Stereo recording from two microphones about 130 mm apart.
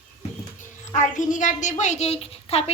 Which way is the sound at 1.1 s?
75° left (ahead or behind).